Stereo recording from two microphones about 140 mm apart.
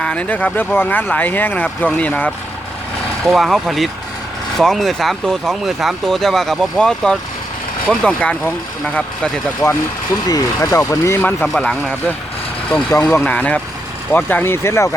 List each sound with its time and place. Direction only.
0.0 s speech: 10° left (ahead or behind)
3.2 s speech: centre (ahead or behind)
10.2 s speech: 25° left (ahead or behind)
11.4 s speech: centre (ahead or behind)
12.7 s speech: 25° left (ahead or behind)
13.1 s speech: 10° left (ahead or behind)